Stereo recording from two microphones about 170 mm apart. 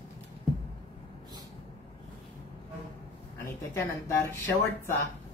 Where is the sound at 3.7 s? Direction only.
15° left (ahead or behind).